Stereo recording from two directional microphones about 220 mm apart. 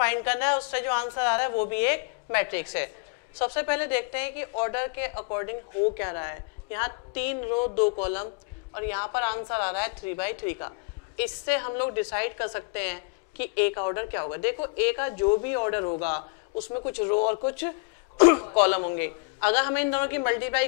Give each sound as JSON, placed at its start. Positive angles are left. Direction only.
{"t": 0.0, "sound": "a woman's voice", "side_deg": 15}
{"t": 7.3, "sound": "speech", "side_deg": 40}
{"t": 8.0, "sound": "a woman's voice", "side_deg": 15}